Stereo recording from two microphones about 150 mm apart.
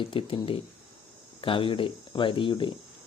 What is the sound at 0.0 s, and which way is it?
Speech, 35° left (ahead or behind).